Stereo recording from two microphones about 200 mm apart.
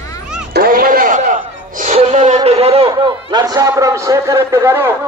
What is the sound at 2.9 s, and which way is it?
A man's voice, 20° right (ahead or behind).